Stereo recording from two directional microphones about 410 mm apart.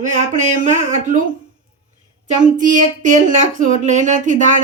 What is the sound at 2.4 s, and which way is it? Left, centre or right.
Speech, centre.